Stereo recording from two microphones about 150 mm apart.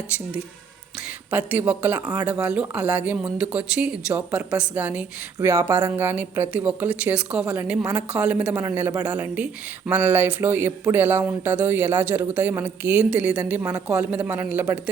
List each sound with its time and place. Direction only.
1.3 s speech: 10° right (ahead or behind)